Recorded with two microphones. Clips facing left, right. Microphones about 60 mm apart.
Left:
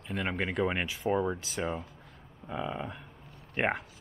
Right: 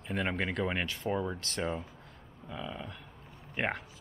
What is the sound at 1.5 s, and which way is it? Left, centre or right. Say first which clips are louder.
Speech: left 1 dB; centre.